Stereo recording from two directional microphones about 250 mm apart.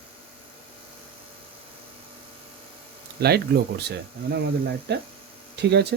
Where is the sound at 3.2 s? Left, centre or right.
Right.